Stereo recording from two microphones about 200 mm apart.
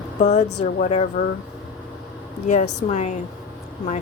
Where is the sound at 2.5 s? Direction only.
35° left (ahead or behind).